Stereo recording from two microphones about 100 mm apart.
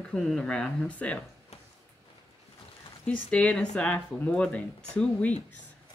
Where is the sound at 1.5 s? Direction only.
90° left.